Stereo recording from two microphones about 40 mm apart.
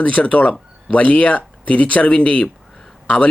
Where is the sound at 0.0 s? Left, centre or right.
Left.